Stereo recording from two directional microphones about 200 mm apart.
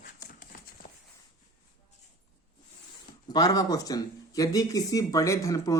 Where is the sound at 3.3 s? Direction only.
20° left (ahead or behind).